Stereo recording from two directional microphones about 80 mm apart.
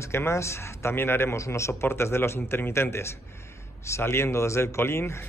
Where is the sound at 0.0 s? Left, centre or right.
Left.